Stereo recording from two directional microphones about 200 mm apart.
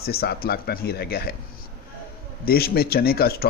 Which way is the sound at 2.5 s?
50° left (ahead or behind).